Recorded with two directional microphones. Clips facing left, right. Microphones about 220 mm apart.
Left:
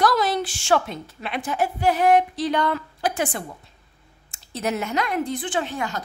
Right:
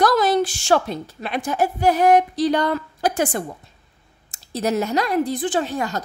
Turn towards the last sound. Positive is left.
turn(degrees=-40)  # may be behind; listen again after turning